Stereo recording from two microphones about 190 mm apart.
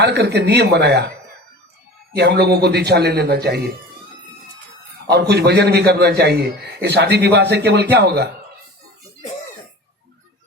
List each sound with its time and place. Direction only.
0.0 s a man's voice: 65° right (ahead or behind)
2.1 s a man's voice: 60° right (ahead or behind)
5.3 s a man's voice: 60° right (ahead or behind)